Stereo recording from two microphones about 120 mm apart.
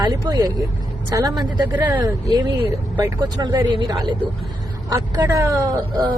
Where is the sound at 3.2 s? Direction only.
35° right (ahead or behind).